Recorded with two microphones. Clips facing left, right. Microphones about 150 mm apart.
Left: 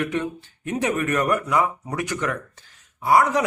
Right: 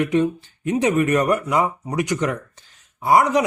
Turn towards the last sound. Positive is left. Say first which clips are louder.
# right 2 dB
turn(degrees=-20)  # may be behind; listen again after turning